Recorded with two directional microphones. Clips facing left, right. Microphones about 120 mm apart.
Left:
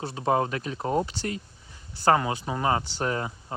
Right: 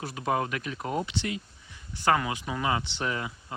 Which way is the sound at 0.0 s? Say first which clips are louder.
Left 4 dB; 30° left (ahead or behind).